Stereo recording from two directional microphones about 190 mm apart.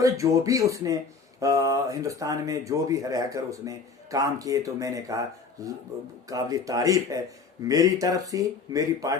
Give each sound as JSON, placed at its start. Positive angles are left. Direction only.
{"t": 0.0, "sound": "speech", "side_deg": -15}